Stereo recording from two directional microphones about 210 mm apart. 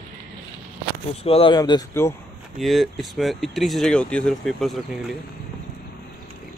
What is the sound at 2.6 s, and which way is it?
Speech, centre (ahead or behind).